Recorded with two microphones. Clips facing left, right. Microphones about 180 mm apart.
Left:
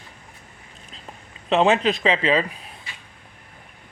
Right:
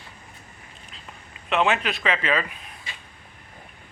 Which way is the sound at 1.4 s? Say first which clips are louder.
Left 5 dB; 30° left (ahead or behind).